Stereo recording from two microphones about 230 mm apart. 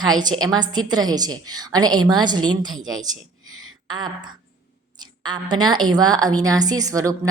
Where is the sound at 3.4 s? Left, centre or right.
Right.